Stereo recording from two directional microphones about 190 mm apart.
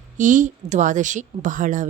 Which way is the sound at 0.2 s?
40° right (ahead or behind).